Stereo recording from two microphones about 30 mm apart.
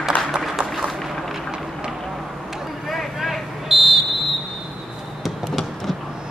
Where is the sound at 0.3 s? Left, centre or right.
Right.